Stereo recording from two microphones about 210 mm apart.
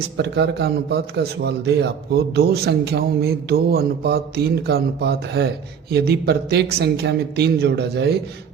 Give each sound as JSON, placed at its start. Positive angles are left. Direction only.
{"t": 0.2, "sound": "speech", "side_deg": -55}